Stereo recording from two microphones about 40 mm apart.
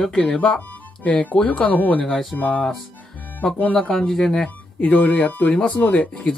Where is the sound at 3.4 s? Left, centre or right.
Left.